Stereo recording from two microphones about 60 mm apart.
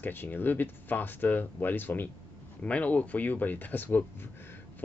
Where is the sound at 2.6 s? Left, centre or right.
Left.